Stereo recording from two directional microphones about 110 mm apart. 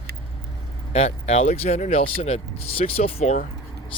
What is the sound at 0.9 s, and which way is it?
Speech, 80° left.